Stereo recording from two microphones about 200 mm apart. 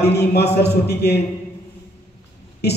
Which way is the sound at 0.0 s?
55° left (ahead or behind).